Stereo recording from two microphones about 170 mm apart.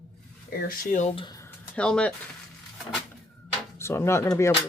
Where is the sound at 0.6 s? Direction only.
55° left (ahead or behind).